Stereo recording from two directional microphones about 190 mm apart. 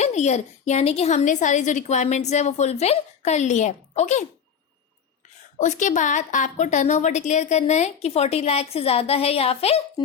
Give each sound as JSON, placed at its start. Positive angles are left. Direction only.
{"t": 0.0, "sound": "a woman's voice", "side_deg": 35}
{"t": 5.5, "sound": "a woman's voice", "side_deg": 40}